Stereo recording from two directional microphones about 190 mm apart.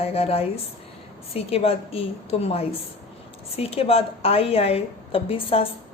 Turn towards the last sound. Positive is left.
turn(degrees=30)  # may be behind; listen again after turning